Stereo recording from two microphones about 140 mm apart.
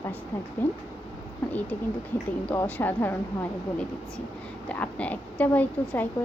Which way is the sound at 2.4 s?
10° left (ahead or behind).